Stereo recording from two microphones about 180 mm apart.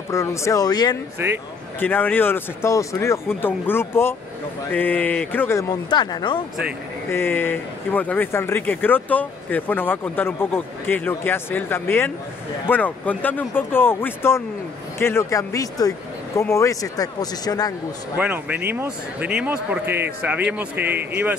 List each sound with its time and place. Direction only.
0.1 s speech: 15° left (ahead or behind)
1.2 s speech: 15° right (ahead or behind)
1.8 s speech: 10° left (ahead or behind)
7.1 s speech: 10° left (ahead or behind)
18.1 s speech: 10° right (ahead or behind)